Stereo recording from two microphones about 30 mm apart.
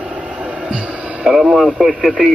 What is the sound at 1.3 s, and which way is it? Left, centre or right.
Speech, centre.